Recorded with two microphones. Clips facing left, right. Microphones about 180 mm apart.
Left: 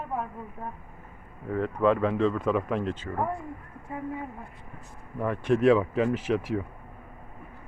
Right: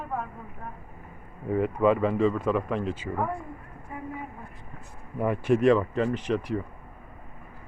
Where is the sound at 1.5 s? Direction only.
10° right (ahead or behind).